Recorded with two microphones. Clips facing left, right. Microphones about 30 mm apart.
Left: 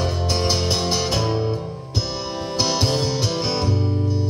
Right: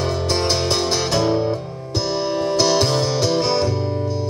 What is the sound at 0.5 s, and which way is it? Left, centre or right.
Music, centre.